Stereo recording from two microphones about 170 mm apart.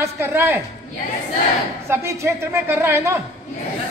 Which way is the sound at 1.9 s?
15° right (ahead or behind).